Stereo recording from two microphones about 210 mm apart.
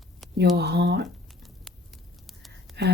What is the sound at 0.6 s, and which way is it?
Speech, 55° right (ahead or behind).